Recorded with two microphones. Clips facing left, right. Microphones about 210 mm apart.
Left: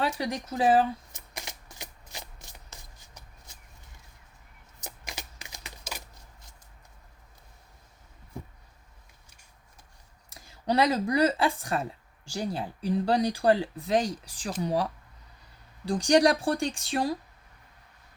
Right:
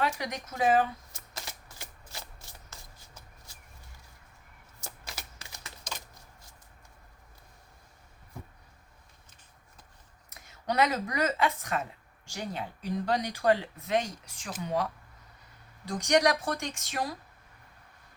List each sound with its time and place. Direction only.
0.0 s speech: 30° left (ahead or behind)
1.1 s shuffling cards: 15° left (ahead or behind)
4.8 s shuffling cards: 15° left (ahead or behind)
10.2 s speech: 30° left (ahead or behind)